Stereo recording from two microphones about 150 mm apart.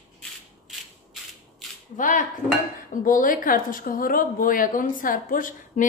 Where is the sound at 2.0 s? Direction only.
60° left (ahead or behind).